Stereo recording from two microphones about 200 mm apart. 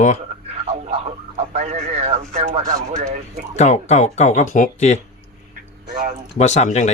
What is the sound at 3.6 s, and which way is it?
Speech, 35° left (ahead or behind).